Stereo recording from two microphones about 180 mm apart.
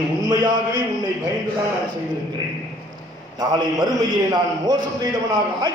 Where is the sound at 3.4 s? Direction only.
25° right (ahead or behind).